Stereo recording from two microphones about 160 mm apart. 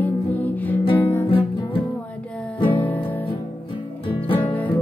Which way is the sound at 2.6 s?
30° left (ahead or behind).